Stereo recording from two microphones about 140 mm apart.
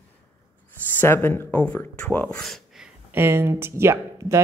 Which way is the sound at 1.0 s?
15° left (ahead or behind).